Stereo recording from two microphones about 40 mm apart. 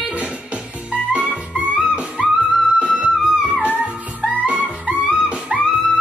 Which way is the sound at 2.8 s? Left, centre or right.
Right.